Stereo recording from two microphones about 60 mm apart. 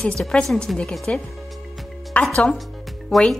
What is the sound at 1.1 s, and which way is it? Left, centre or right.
Speech, left.